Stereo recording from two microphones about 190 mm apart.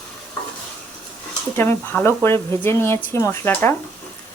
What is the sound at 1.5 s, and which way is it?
Speech, 10° left (ahead or behind).